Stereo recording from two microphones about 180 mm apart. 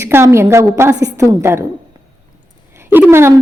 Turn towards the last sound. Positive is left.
turn(degrees=-15)  # may be behind; listen again after turning